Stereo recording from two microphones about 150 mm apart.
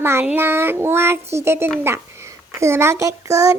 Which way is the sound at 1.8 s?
15° right (ahead or behind).